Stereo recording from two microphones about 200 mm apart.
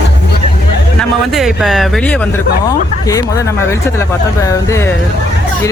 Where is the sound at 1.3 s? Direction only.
Centre (ahead or behind).